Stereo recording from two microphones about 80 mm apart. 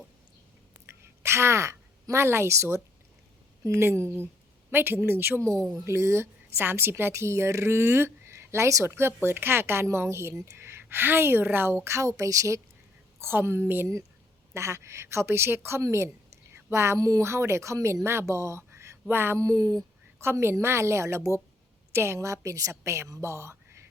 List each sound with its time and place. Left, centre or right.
0.9 s a sound: right
3.6 s a woman's voice: right
13.1 s a woman's voice: right
19.4 s speech: right
20.1 s a woman's voice: right